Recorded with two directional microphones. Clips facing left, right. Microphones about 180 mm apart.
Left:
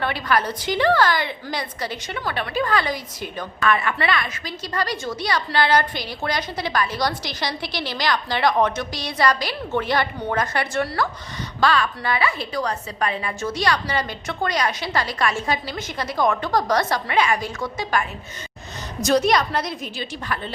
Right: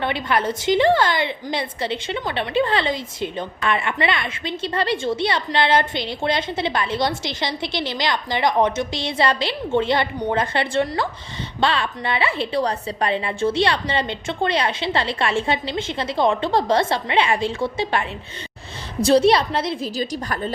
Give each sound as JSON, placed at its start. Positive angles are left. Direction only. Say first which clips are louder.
{"t": 0.0, "sound": "a woman's voice", "louder": "right 1 dB", "side_deg": -25}